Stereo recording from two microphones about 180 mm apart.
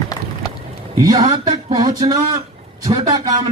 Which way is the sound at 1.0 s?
20° right (ahead or behind).